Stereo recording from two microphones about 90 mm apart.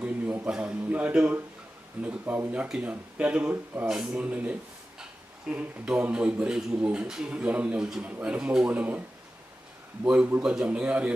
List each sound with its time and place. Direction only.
0.0 s a sound: 15° right (ahead or behind)
0.5 s a man's voice: 15° right (ahead or behind)
10.0 s a man's voice: 15° right (ahead or behind)